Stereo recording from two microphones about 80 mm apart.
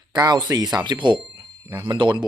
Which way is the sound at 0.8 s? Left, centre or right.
Right.